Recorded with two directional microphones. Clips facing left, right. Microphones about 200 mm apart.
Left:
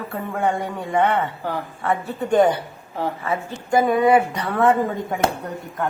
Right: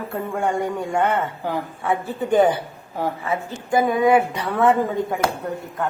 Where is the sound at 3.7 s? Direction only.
Centre (ahead or behind).